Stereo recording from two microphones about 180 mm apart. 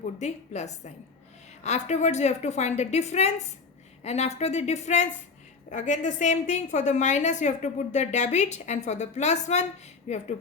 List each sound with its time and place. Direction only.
0.0 s a woman's voice: 40° left (ahead or behind)